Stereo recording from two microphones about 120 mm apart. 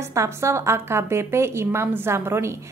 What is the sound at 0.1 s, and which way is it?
A woman's voice, 25° right (ahead or behind).